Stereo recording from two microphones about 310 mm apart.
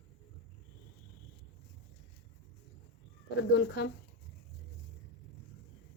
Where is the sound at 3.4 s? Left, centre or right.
Left.